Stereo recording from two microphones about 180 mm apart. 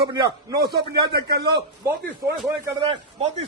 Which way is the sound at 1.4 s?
25° right (ahead or behind).